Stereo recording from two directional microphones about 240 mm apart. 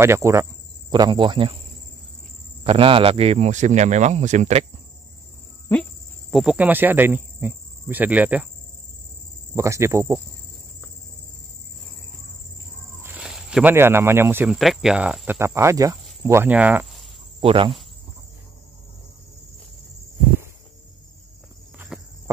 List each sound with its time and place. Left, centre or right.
0.0 s speech: centre
2.6 s speech: right
5.7 s speech: centre
6.3 s cricket: centre
9.6 s cricket: centre
13.0 s speech: centre
17.4 s cricket: right
21.7 s cricket: centre